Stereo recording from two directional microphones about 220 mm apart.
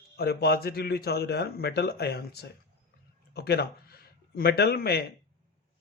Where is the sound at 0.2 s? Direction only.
45° left (ahead or behind).